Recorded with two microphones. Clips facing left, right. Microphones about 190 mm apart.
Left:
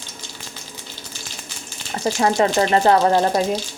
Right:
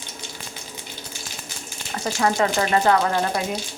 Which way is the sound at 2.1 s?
25° left (ahead or behind).